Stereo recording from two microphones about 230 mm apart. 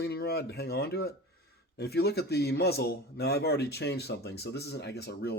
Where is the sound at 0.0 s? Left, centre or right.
Left.